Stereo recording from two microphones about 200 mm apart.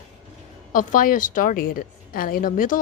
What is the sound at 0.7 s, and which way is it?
A woman's voice, 40° left (ahead or behind).